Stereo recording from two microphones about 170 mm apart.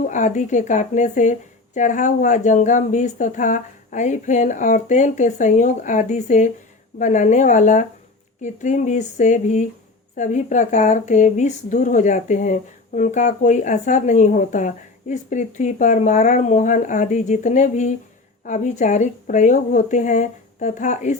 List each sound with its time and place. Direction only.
0.0 s speech: 45° left (ahead or behind)